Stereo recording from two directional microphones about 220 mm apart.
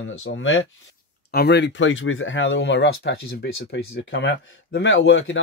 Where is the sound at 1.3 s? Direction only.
50° left (ahead or behind).